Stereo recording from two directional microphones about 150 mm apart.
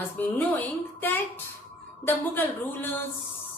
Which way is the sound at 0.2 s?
10° left (ahead or behind).